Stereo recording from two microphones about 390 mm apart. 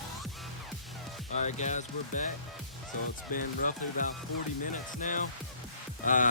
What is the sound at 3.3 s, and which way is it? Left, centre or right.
Speech, left.